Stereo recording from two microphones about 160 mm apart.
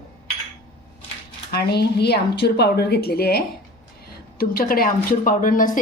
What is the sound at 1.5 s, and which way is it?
A woman's voice, 90° left.